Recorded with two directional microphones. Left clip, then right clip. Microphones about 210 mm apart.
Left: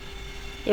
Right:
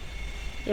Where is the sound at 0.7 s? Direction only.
15° left (ahead or behind).